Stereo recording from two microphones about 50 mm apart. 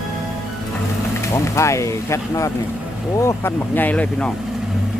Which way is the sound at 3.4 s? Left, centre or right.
Left.